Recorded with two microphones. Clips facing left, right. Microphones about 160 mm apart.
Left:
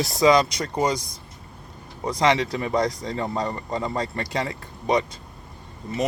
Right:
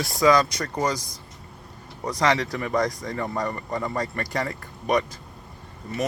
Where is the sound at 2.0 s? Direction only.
20° left (ahead or behind).